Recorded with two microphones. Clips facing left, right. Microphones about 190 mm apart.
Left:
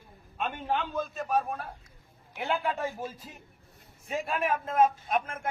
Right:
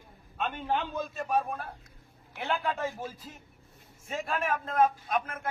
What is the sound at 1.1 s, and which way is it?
Speech, centre (ahead or behind).